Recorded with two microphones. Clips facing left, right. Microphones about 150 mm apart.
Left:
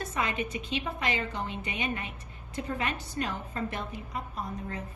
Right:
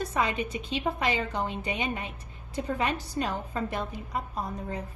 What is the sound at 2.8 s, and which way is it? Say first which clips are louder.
Speech: right 3 dB; 35° right (ahead or behind).